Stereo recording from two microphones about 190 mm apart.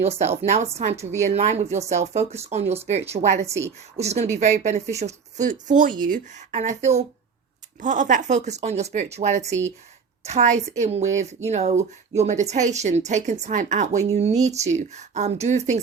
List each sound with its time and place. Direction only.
0.2 s speech: 35° right (ahead or behind)
3.5 s a woman's voice: 15° right (ahead or behind)
4.0 s speech: 35° right (ahead or behind)